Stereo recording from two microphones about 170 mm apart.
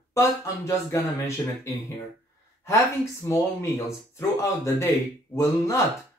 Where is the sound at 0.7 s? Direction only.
15° left (ahead or behind).